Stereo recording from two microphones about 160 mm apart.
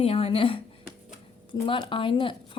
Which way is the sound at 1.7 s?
30° left (ahead or behind).